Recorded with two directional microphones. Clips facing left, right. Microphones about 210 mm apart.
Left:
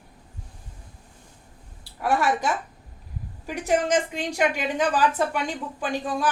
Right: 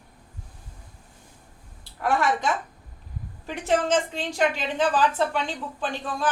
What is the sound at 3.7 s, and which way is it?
A woman's voice, 15° left (ahead or behind).